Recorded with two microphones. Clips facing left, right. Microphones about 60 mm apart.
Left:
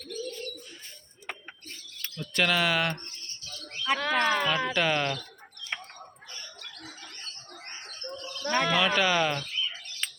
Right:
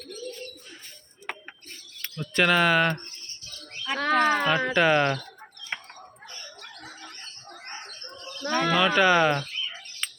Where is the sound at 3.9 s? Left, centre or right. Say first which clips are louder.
Right 4 dB; right.